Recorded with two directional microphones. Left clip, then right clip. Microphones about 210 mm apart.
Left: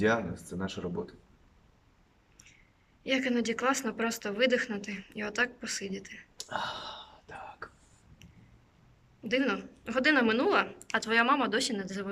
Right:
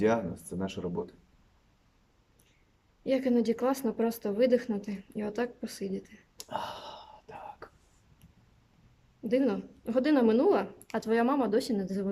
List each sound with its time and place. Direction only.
0.0 s speech: 5° right (ahead or behind)
3.0 s speech: 20° right (ahead or behind)
6.5 s whispering: 10° right (ahead or behind)
9.3 s speech: 20° right (ahead or behind)